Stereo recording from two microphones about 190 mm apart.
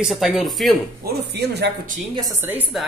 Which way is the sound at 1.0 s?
55° right (ahead or behind).